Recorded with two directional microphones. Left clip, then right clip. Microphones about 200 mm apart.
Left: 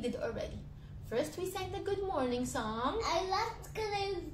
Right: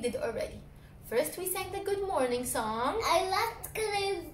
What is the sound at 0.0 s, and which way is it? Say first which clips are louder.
A woman's voice: right 5 dB; 5° left (ahead or behind).